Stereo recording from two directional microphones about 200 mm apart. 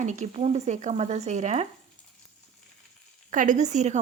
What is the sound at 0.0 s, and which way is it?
A woman's voice, 35° right (ahead or behind).